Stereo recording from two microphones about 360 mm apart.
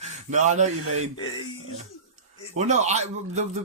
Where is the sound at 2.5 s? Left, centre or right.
Centre.